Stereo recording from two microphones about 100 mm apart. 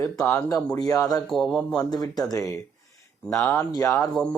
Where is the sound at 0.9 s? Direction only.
35° left (ahead or behind).